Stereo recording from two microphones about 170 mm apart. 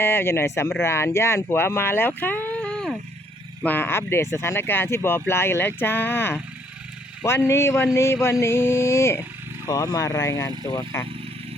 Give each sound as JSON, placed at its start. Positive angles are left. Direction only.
{"t": 0.0, "sound": "speech", "side_deg": 15}